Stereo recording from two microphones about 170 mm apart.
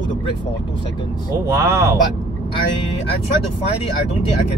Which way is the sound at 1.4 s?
15° right (ahead or behind).